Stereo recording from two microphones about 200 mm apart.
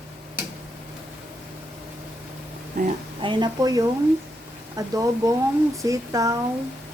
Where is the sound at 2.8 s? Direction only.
45° right (ahead or behind).